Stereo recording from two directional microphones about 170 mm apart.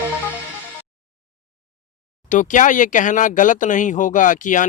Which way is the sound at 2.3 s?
50° left (ahead or behind).